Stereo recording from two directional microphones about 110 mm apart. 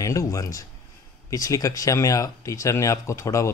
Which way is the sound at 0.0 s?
30° left (ahead or behind).